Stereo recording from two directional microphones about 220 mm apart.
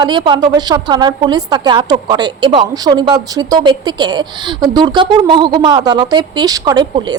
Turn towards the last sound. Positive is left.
turn(degrees=-20)  # may be behind; listen again after turning